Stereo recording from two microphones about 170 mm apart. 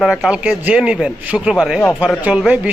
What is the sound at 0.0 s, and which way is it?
A man's voice, 5° right (ahead or behind).